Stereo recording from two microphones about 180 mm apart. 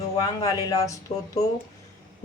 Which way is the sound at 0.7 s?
20° left (ahead or behind).